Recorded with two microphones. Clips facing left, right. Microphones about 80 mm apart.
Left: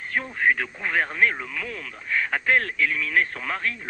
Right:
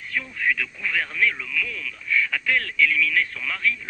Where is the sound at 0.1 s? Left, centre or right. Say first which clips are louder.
Left 3 dB; left.